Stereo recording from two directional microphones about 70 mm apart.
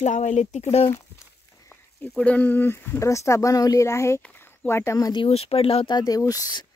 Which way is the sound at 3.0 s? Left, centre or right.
Left.